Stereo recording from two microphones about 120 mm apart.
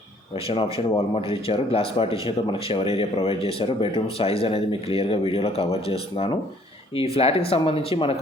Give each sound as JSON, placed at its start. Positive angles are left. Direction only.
{"t": 0.4, "sound": "speech", "side_deg": 55}